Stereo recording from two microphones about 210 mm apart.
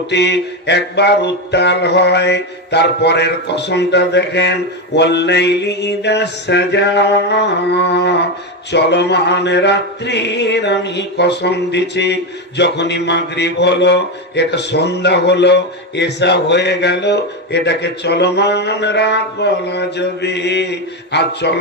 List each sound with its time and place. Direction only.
0.1 s music: 55° left (ahead or behind)
4.9 s mantra: 55° left (ahead or behind)
8.7 s music: 55° left (ahead or behind)